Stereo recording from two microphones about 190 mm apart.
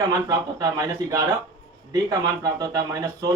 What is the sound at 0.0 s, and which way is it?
Speech, 20° right (ahead or behind).